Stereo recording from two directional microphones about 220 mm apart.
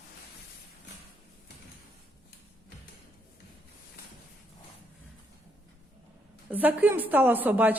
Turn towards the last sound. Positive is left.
turn(degrees=-10)  # may be behind; listen again after turning